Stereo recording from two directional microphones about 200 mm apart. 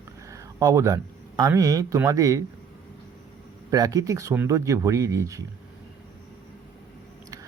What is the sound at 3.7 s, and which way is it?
Speech, 20° right (ahead or behind).